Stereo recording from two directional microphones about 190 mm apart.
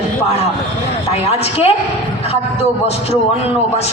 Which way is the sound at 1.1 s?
35° left (ahead or behind).